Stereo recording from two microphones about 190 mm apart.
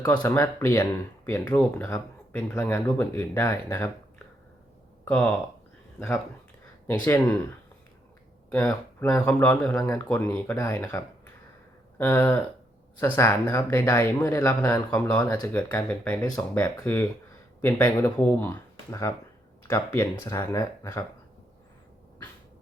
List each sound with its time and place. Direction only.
0.2 s speech: 15° left (ahead or behind)
5.0 s speech: 10° left (ahead or behind)
6.9 s speech: 20° left (ahead or behind)
8.4 s speech: 5° left (ahead or behind)